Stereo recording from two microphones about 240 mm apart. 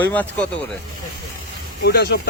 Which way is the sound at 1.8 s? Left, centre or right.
Left.